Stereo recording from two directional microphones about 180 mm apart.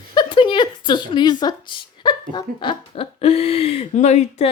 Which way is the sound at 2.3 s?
25° left (ahead or behind).